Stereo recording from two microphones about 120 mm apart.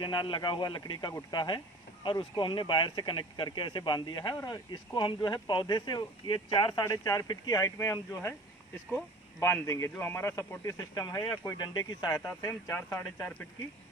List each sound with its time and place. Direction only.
0.0 s speech: 40° left (ahead or behind)
6.8 s speech: 30° left (ahead or behind)
12.2 s speech: 20° left (ahead or behind)
12.7 s speech: 15° left (ahead or behind)